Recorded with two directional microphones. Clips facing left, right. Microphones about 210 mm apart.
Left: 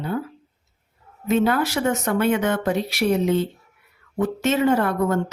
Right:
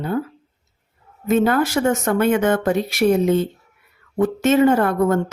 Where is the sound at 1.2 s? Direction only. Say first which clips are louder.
Right 3 dB; 50° right (ahead or behind).